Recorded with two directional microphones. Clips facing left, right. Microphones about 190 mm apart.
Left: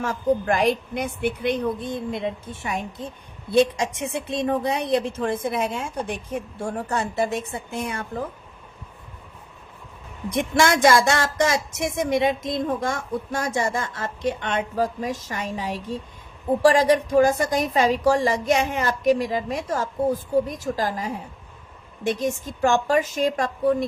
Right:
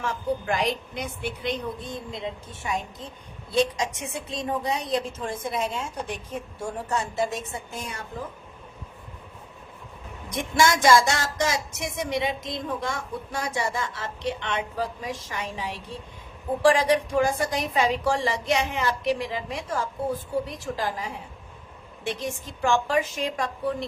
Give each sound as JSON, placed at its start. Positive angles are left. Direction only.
{"t": 0.0, "sound": "a woman's voice", "side_deg": 45}
{"t": 10.6, "sound": "a woman's voice", "side_deg": 55}